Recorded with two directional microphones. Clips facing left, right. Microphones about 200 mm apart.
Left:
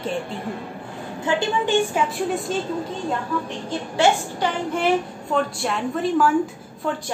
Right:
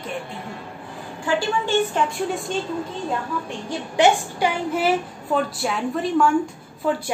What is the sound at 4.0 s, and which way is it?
A woman's voice, 10° right (ahead or behind).